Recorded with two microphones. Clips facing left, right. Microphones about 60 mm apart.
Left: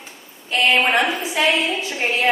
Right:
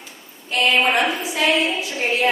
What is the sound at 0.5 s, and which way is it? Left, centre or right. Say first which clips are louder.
A woman's voice: left 1 dB; left.